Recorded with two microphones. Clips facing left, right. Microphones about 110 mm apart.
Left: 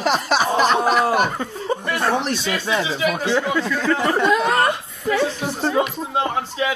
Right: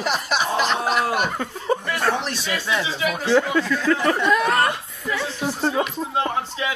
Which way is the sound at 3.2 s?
15° left (ahead or behind).